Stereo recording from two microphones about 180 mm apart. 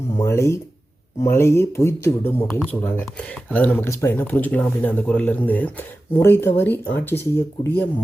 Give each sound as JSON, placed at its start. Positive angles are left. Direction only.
{"t": 0.2, "sound": "speech", "side_deg": 15}